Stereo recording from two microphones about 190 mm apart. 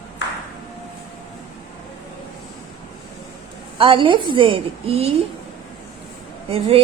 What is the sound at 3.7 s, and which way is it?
A woman's voice, 25° right (ahead or behind).